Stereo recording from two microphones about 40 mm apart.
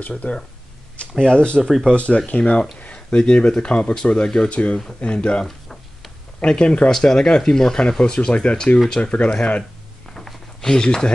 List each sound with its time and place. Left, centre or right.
0.0 s speech: left
1.2 s speech: left
1.6 s speech: centre
2.0 s speech: left
6.9 s speech: centre
8.7 s speech: centre
9.0 s speech: left
10.1 s a sound: centre